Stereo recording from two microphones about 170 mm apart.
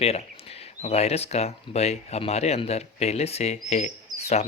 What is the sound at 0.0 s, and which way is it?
Speech, 35° left (ahead or behind).